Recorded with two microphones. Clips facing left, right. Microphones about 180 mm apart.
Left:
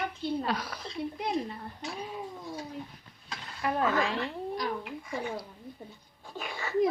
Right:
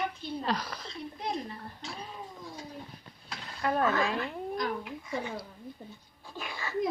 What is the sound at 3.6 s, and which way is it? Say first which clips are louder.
Speech: even; 20° left (ahead or behind).